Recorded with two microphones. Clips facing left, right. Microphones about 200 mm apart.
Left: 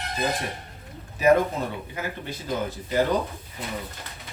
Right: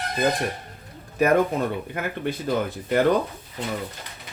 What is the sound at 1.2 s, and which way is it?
Speech, 55° right (ahead or behind).